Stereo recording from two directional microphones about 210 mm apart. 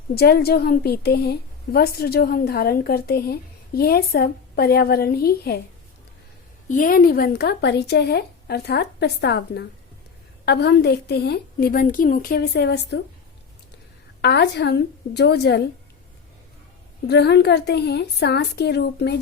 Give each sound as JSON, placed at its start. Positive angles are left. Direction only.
{"t": 0.1, "sound": "a woman's voice", "side_deg": 50}
{"t": 6.7, "sound": "a woman's voice", "side_deg": 40}
{"t": 14.2, "sound": "a woman's voice", "side_deg": 50}
{"t": 17.1, "sound": "a woman's voice", "side_deg": 50}